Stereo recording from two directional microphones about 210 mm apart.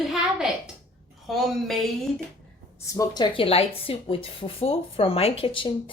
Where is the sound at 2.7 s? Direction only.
15° left (ahead or behind).